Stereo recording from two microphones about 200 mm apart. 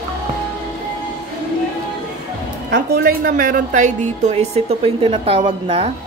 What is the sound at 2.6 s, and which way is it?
A woman's voice, 50° right (ahead or behind).